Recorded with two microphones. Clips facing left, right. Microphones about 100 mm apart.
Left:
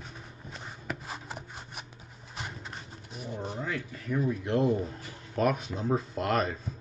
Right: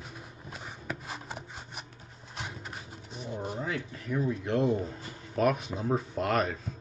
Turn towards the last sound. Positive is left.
turn(degrees=0)  # may be behind; listen again after turning